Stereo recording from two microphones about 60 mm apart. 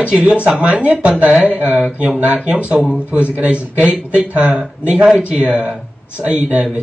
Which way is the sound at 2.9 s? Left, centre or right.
Right.